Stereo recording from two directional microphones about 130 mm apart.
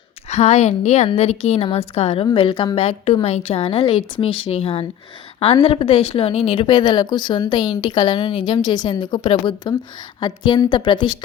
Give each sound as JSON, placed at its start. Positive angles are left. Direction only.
{"t": 0.3, "sound": "a woman's voice", "side_deg": 60}